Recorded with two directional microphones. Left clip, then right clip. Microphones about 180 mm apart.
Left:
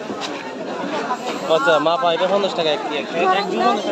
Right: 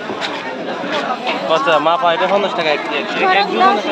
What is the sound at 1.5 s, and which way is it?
Speech, 40° left (ahead or behind).